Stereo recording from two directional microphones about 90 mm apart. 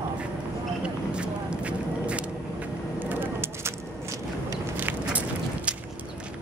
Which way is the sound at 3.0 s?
20° right (ahead or behind).